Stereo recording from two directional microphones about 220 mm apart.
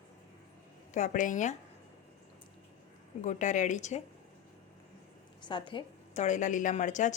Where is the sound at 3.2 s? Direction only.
35° left (ahead or behind).